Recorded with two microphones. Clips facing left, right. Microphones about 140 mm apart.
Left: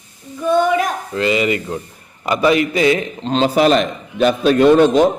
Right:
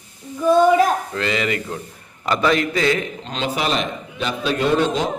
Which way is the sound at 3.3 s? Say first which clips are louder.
Left 9 dB; 40° left (ahead or behind).